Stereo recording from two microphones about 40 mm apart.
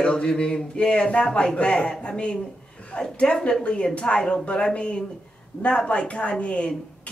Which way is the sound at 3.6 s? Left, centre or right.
Left.